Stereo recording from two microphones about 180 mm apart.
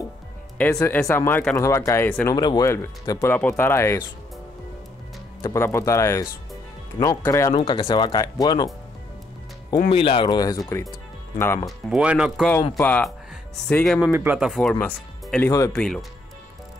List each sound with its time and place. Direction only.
1.0 s speech: 15° left (ahead or behind)
5.4 s speech: 15° left (ahead or behind)
7.5 s speech: 30° left (ahead or behind)
9.8 s speech: 30° left (ahead or behind); by 11.6 s 15° left (ahead or behind)
11.6 s speech: 5° right (ahead or behind)
12.7 s speech: 10° left (ahead or behind)
14.1 s speech: 10° right (ahead or behind); by 15.8 s 15° left (ahead or behind)
15.8 s speech: 5° left (ahead or behind)